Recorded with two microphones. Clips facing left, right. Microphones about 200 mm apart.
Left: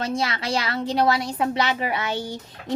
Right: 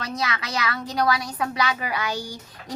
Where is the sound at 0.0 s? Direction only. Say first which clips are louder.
Left 4 dB; 25° left (ahead or behind).